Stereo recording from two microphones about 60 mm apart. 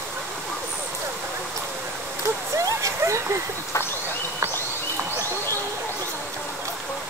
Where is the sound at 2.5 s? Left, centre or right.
Right.